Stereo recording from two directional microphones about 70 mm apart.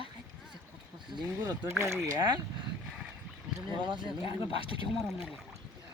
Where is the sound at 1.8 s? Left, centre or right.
Right.